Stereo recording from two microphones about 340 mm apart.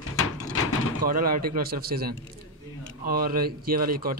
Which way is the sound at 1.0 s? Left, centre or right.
Right.